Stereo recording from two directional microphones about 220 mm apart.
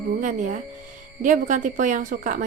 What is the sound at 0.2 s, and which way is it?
Speech, 35° right (ahead or behind).